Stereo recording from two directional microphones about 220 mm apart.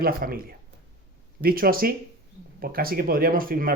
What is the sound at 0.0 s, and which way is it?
Speech, 40° right (ahead or behind).